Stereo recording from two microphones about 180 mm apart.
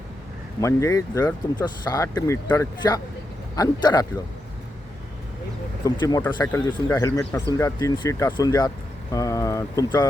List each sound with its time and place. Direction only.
0.6 s speech: 15° left (ahead or behind)
5.8 s speech: 20° left (ahead or behind)